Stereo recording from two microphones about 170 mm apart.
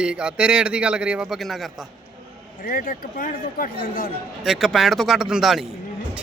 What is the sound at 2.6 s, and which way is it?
A man's voice, 55° left (ahead or behind).